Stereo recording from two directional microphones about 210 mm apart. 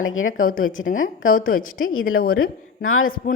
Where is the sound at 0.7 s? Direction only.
70° left (ahead or behind).